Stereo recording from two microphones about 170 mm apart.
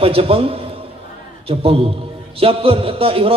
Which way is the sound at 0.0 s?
35° right (ahead or behind).